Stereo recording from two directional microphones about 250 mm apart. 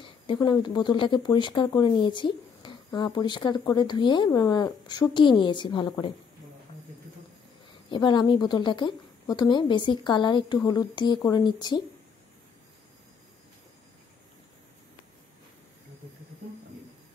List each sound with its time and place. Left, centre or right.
0.0 s speech: centre
7.9 s speech: centre